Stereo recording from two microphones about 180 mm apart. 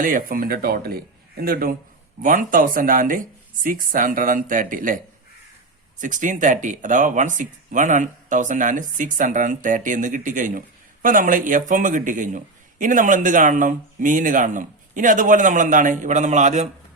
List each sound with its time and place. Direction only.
0.0 s speech: 50° right (ahead or behind)
6.0 s speech: 45° right (ahead or behind)